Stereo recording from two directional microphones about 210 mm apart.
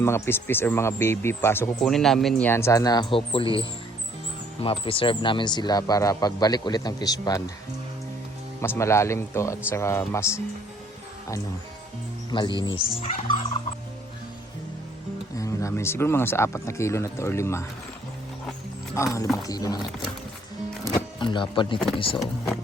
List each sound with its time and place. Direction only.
0.0 s speech: 10° left (ahead or behind)
4.6 s speech: 25° left (ahead or behind)
8.6 s speech: 10° left (ahead or behind)
12.3 s speech: 20° left (ahead or behind)
15.4 s speech: 15° left (ahead or behind)
18.9 s speech: 15° left (ahead or behind)
21.2 s speech: 25° left (ahead or behind)